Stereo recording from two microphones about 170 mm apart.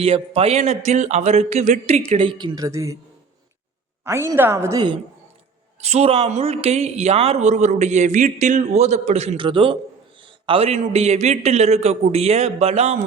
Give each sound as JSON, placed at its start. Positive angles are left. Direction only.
{"t": 0.0, "sound": "speech", "side_deg": -35}
{"t": 4.0, "sound": "a woman's voice", "side_deg": -15}
{"t": 5.8, "sound": "speech", "side_deg": -40}